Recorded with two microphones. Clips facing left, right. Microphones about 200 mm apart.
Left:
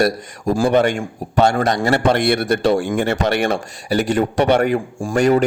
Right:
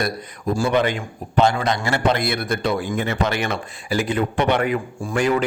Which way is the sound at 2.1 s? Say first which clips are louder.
Left 6 dB; 70° left (ahead or behind).